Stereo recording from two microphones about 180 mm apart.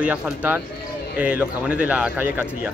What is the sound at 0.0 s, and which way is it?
Speech, 10° right (ahead or behind).